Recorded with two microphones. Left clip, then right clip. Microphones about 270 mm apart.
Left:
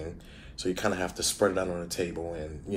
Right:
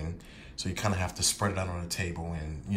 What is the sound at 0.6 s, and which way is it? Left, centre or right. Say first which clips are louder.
Speech: left 3 dB; right.